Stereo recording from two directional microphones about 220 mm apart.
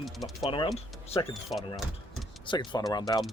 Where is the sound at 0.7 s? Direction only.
25° left (ahead or behind).